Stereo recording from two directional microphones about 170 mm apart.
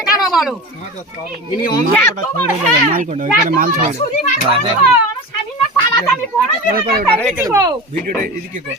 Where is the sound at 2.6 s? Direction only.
45° right (ahead or behind).